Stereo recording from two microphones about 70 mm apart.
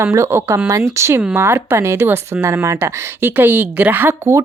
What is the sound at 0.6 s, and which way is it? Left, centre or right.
A woman's voice, right.